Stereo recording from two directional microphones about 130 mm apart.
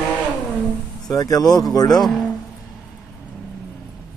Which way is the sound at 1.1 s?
30° left (ahead or behind).